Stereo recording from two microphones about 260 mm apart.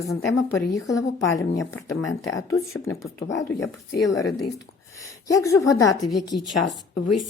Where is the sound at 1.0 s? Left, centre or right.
Centre.